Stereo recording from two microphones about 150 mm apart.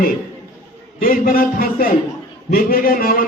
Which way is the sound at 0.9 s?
70° left (ahead or behind).